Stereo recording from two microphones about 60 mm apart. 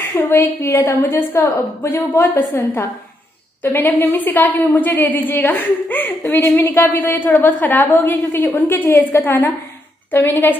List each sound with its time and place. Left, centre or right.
0.3 s a woman's voice: left
1.0 s a woman's voice: left